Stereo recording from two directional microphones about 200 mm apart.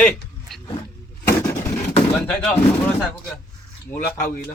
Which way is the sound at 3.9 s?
45° left (ahead or behind).